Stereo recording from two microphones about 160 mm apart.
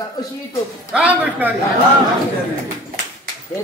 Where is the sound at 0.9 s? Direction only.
10° right (ahead or behind).